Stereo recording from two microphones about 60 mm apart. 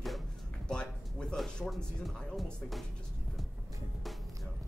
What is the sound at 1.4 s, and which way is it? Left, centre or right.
Music, centre.